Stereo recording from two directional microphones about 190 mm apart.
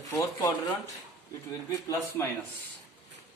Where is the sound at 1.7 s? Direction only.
15° left (ahead or behind).